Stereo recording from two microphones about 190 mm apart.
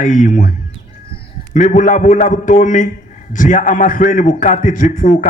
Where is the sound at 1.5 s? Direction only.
40° left (ahead or behind).